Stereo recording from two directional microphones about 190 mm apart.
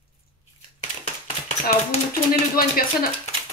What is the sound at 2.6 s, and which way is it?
Speech, 50° left (ahead or behind).